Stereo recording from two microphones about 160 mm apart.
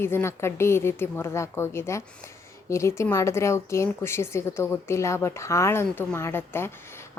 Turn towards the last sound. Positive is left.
turn(degrees=15)  # may be behind; listen again after turning